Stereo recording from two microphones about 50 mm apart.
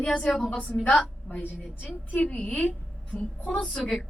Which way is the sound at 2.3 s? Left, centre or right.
Left.